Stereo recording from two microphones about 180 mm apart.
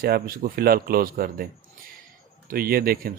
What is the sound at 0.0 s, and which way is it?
Speech, 55° right (ahead or behind).